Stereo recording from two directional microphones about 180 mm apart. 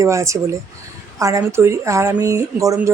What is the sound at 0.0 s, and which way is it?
Speech, 15° right (ahead or behind).